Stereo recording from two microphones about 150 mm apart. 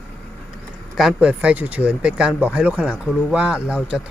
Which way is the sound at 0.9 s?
5° right (ahead or behind).